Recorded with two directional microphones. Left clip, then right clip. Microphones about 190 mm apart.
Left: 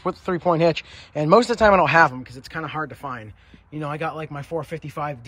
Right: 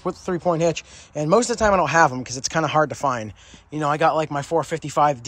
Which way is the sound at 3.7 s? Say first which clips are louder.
Right 9 dB; centre (ahead or behind).